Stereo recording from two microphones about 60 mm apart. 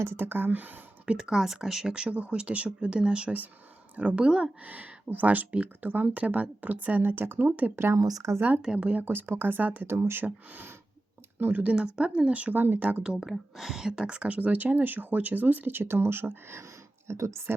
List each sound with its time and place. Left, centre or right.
0.0 s speech: right
1.2 s speech: centre
4.6 s speech: right
7.9 s speech: right
8.4 s speech: right
8.6 s speech: centre
8.9 s speech: right
9.8 s speech: right
10.2 s speech: right
11.6 s speech: right
13.0 s speech: centre; by 17.5 s right